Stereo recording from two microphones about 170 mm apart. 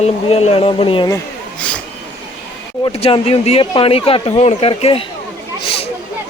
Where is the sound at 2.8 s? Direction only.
35° left (ahead or behind).